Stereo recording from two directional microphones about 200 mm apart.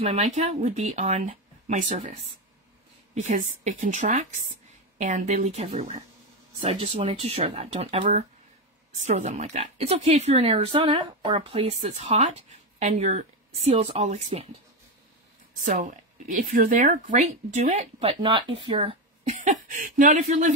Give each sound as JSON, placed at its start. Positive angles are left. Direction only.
{"t": 0.0, "sound": "speech", "side_deg": -35}
{"t": 15.6, "sound": "speech", "side_deg": -40}